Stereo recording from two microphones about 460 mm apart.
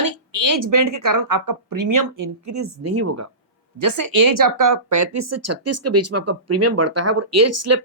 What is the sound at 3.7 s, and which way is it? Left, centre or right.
A woman's voice, right.